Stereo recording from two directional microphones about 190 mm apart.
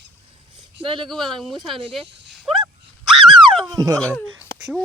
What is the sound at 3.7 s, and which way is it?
Speech, 20° right (ahead or behind).